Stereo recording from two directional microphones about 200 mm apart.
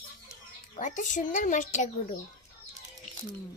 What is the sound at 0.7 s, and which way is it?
Speech, 40° left (ahead or behind).